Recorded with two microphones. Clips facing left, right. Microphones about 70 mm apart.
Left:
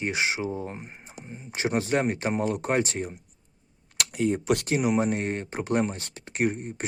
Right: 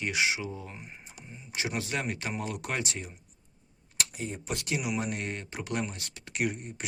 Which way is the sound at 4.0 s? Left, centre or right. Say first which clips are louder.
Left 10 dB; left.